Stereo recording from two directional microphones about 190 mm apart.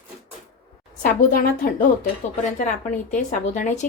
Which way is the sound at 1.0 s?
50° left (ahead or behind).